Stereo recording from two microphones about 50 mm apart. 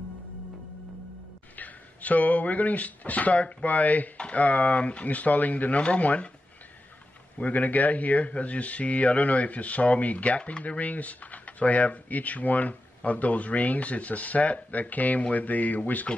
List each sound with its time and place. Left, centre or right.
1.6 s speech: left
7.3 s speech: left